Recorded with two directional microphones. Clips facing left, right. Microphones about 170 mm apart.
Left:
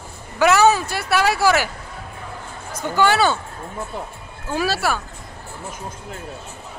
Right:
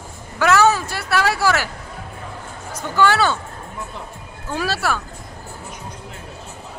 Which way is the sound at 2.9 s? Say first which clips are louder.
Even; 15° left (ahead or behind).